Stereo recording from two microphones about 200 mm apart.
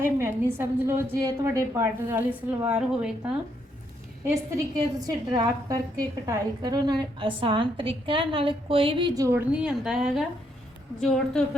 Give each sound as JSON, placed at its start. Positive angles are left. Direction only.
{"t": 0.0, "sound": "a woman's voice", "side_deg": -10}
{"t": 4.5, "sound": "a woman's voice", "side_deg": -20}
{"t": 11.4, "sound": "a woman's voice", "side_deg": 5}